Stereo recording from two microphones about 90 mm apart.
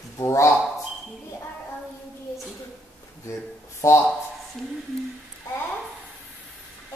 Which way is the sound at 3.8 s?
30° left (ahead or behind).